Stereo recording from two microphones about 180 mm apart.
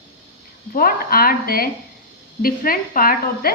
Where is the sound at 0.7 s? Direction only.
55° left (ahead or behind).